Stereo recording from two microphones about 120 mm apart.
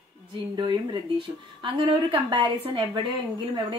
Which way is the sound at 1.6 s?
45° right (ahead or behind).